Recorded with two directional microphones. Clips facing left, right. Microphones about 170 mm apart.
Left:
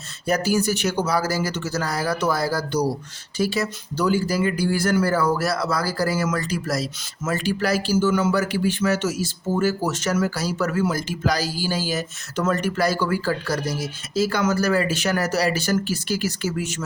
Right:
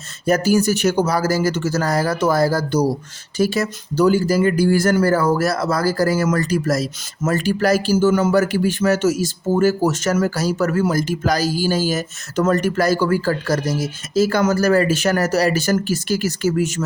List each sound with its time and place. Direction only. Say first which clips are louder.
0.3 s speech: right 5 dB; 45° right (ahead or behind)